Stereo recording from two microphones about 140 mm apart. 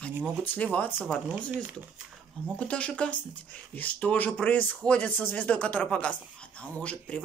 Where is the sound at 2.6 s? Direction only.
10° left (ahead or behind).